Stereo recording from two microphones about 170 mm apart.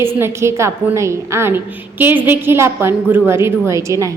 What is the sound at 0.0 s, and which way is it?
A woman's voice, 15° right (ahead or behind).